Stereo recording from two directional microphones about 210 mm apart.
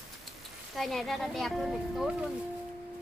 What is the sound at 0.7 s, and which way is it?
Speech, centre (ahead or behind).